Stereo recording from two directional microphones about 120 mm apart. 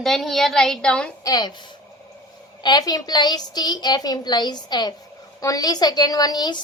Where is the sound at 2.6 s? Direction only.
35° left (ahead or behind).